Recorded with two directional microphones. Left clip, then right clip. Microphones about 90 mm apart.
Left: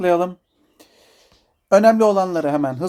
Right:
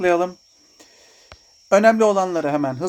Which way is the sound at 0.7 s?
25° left (ahead or behind).